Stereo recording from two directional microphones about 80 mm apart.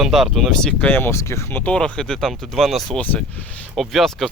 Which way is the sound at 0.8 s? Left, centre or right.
Left.